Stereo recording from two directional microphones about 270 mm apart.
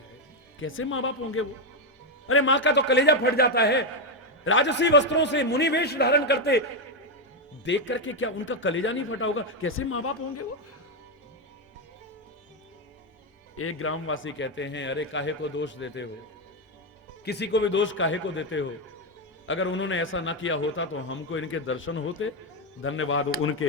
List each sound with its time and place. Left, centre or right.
0.6 s a man's voice: left
7.6 s a man's voice: left
13.6 s a man's voice: left
17.2 s a man's voice: left